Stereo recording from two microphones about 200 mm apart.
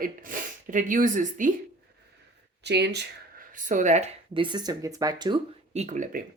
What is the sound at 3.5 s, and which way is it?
Speech, 40° right (ahead or behind).